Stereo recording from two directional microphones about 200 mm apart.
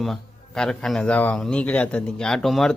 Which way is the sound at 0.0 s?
Centre (ahead or behind).